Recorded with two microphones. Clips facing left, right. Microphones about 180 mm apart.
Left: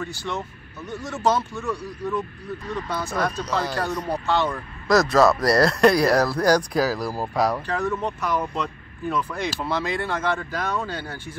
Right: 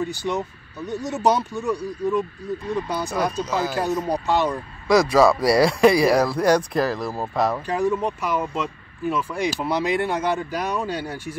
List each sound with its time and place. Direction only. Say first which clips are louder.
0.3 s speech: right 5 dB; 15° right (ahead or behind)
3.8 s speech: right 3 dB; 20° right (ahead or behind)
5.1 s speech: right 1 dB; 5° right (ahead or behind)
7.6 s speech: right 3 dB; 15° right (ahead or behind)